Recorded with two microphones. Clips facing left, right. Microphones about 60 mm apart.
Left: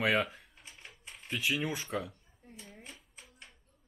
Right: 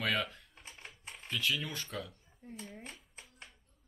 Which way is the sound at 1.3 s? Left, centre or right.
Centre.